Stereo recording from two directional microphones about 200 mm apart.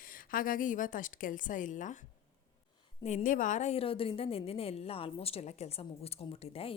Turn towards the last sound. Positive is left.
turn(degrees=30)  # may be behind; listen again after turning